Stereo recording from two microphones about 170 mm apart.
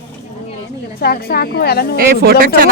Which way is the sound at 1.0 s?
65° left (ahead or behind).